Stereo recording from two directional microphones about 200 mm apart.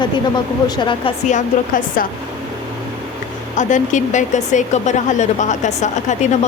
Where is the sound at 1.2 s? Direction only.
40° left (ahead or behind).